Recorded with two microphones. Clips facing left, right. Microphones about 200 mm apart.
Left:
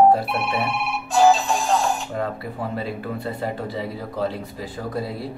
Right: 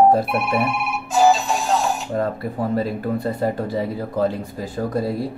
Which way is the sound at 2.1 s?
40° right (ahead or behind).